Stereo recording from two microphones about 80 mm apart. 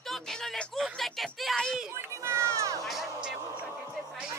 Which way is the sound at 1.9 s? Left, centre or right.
Right.